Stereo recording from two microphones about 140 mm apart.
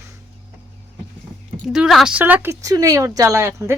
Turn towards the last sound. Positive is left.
turn(degrees=-20)  # may be behind; listen again after turning